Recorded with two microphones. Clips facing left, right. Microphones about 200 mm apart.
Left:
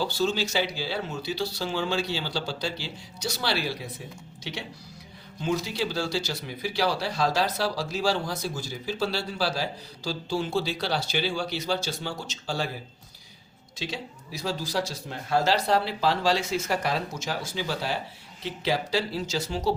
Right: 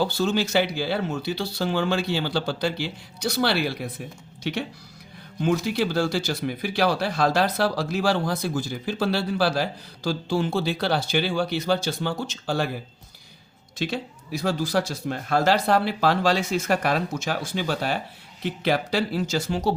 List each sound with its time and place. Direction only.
0.0 s speech: 55° right (ahead or behind)
5.4 s speech: 55° right (ahead or behind)
13.7 s speech: 55° right (ahead or behind)